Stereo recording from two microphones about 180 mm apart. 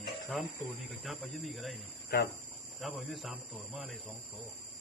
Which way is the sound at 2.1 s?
60° left (ahead or behind).